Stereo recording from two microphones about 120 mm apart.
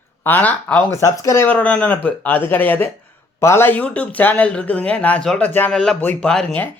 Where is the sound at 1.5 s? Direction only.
10° left (ahead or behind).